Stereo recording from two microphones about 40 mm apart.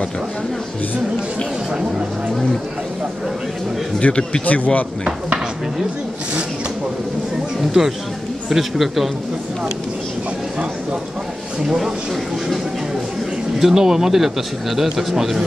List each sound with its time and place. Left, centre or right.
4.0 s speech: left
7.8 s a man's voice: centre
11.6 s speech: centre
13.6 s a man's voice: centre